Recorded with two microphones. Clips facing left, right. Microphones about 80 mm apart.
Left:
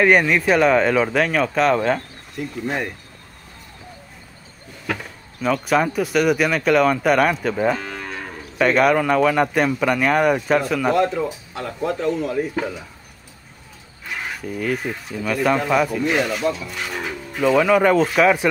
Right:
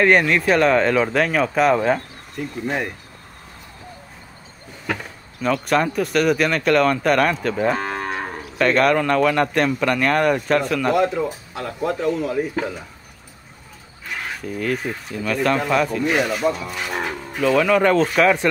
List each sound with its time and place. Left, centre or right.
0.0 s speech: centre
4.8 s speech: centre
7.7 s moo: right
8.5 s speech: centre
14.0 s speech: centre